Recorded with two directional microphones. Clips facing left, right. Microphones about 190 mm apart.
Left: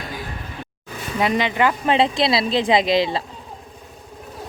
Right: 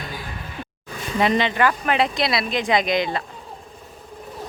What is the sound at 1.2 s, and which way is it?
Speech, 10° left (ahead or behind).